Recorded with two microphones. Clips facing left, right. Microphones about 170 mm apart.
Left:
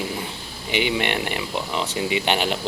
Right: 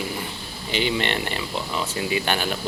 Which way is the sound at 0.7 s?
15° left (ahead or behind).